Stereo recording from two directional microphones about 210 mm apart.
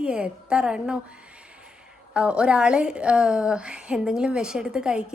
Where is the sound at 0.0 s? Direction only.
5° right (ahead or behind).